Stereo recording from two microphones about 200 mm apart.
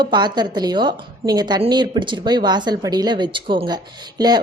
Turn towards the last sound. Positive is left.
turn(degrees=-20)  # may be behind; listen again after turning